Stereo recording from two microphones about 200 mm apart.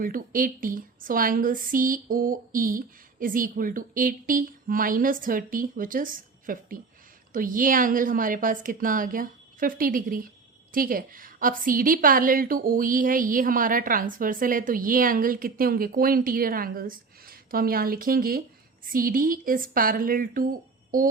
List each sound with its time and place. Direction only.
0.0 s a woman's voice: 45° right (ahead or behind)